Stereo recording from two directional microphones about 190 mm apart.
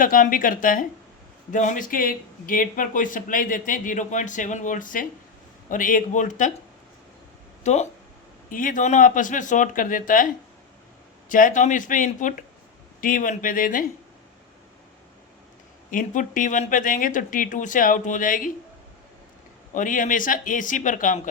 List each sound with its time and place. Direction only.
0.0 s speech: 45° left (ahead or behind)
7.6 s speech: 35° left (ahead or behind)
11.3 s speech: 45° left (ahead or behind)
15.9 s speech: 45° left (ahead or behind)
19.7 s speech: 45° left (ahead or behind)